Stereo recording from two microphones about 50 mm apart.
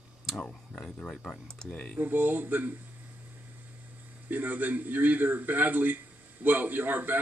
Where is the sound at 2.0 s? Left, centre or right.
Right.